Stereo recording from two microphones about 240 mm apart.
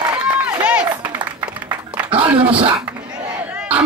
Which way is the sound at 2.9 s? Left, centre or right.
Centre.